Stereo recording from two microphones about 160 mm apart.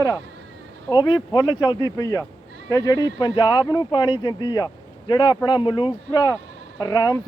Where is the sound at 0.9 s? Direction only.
30° left (ahead or behind).